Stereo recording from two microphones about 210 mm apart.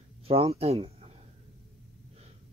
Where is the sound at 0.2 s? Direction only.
30° right (ahead or behind).